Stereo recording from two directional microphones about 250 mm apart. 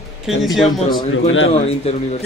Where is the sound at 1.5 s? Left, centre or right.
Left.